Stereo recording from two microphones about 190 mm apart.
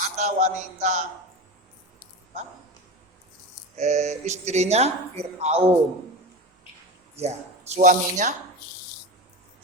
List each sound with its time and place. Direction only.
0.0 s a man's voice: 40° right (ahead or behind)
3.8 s speech: 35° right (ahead or behind)
7.2 s speech: 35° right (ahead or behind)